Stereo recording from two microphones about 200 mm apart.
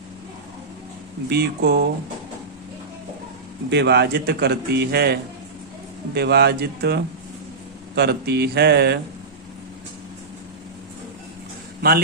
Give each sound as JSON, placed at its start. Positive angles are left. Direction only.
{"t": 1.3, "sound": "speech", "side_deg": -50}
{"t": 3.7, "sound": "a man's voice", "side_deg": -60}
{"t": 6.1, "sound": "a man's voice", "side_deg": -55}
{"t": 11.8, "sound": "a man's voice", "side_deg": -50}